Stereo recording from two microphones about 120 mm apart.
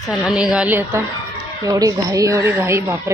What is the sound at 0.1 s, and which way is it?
Speech, 5° right (ahead or behind).